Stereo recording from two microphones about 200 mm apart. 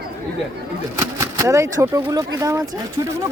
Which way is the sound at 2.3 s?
15° right (ahead or behind).